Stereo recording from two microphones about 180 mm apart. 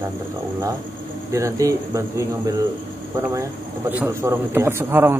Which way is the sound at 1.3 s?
15° right (ahead or behind).